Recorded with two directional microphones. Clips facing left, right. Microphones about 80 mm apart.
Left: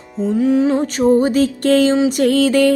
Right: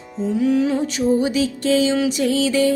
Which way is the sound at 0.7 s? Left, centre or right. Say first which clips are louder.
Left 5 dB; left.